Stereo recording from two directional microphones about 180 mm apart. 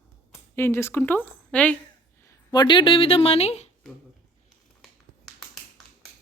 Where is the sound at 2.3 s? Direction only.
20° left (ahead or behind); by 3.6 s 35° left (ahead or behind).